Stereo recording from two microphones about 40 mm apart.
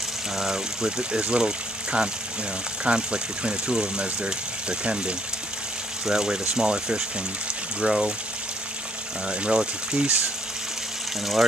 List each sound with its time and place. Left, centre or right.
0.4 s speech: centre
9.3 s speech: right